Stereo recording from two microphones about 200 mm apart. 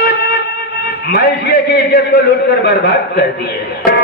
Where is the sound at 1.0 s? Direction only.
50° left (ahead or behind).